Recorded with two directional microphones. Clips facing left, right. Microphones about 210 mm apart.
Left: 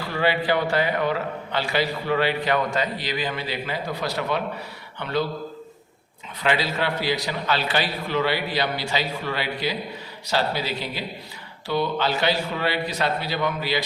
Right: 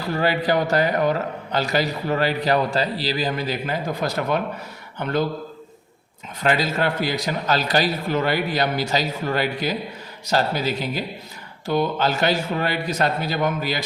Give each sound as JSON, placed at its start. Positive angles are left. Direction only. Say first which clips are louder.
{"t": 0.1, "sound": "a man's voice", "louder": "right 2 dB", "side_deg": -40}
{"t": 6.4, "sound": "a man's voice", "louder": "right 3 dB", "side_deg": -45}